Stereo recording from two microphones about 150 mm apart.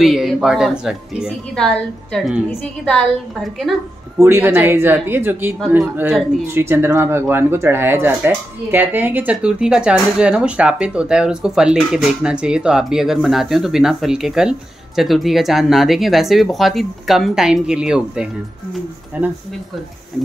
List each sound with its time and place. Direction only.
0.0 s speech: centre (ahead or behind)
4.2 s speech: 15° right (ahead or behind)